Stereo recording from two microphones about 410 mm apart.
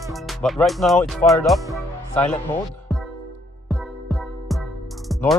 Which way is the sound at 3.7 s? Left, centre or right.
Centre.